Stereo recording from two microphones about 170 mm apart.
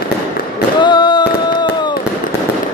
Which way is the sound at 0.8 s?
25° left (ahead or behind).